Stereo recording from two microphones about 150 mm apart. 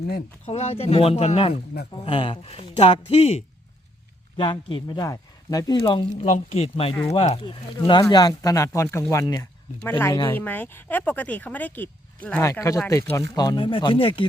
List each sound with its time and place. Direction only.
0.4 s speech: 45° left (ahead or behind)
4.4 s speech: 35° left (ahead or behind)
6.2 s speech: 50° left (ahead or behind)
7.9 s speech: 30° left (ahead or behind)
10.3 s speech: 10° left (ahead or behind); by 14.3 s 35° left (ahead or behind)